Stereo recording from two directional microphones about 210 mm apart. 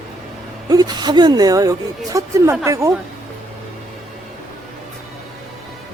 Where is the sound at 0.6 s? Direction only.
20° right (ahead or behind).